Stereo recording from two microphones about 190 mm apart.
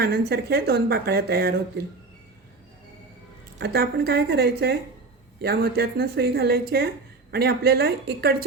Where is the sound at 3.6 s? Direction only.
55° right (ahead or behind).